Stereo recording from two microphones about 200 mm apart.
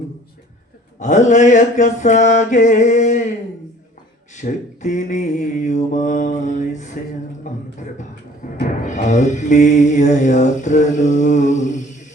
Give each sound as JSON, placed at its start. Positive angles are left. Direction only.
{"t": 0.9, "sound": "mantra", "side_deg": 35}
{"t": 4.4, "sound": "mantra", "side_deg": 35}
{"t": 7.4, "sound": "a sound", "side_deg": 40}
{"t": 8.6, "sound": "mantra", "side_deg": 40}